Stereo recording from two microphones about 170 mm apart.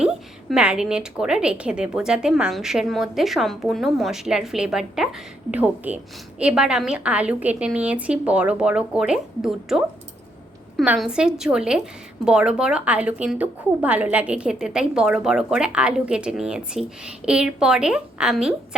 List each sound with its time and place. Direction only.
0.0 s a woman's voice: 5° right (ahead or behind)